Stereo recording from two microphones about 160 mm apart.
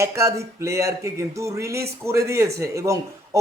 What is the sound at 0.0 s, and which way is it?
A man's voice, 20° right (ahead or behind).